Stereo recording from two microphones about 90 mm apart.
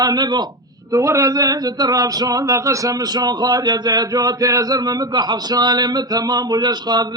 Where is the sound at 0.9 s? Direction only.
35° right (ahead or behind).